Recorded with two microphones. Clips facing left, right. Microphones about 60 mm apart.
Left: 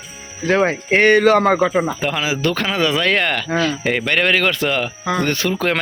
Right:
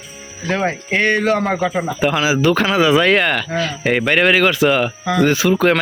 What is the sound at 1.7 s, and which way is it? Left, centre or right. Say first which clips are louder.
Speech: right 1 dB; centre.